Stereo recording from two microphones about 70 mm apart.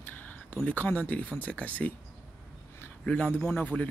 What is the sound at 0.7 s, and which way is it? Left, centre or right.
Speech, left.